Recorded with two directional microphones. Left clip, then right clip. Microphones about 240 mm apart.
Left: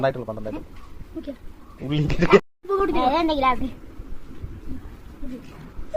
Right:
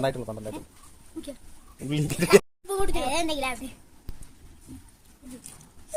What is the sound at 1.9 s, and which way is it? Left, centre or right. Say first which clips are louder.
Speech: left 2 dB; right.